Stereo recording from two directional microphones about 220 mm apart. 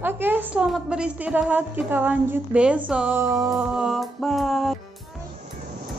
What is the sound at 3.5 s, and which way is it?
Speech, 5° right (ahead or behind).